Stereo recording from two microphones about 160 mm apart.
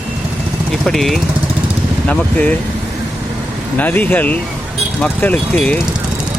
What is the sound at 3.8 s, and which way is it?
Speech, 10° left (ahead or behind).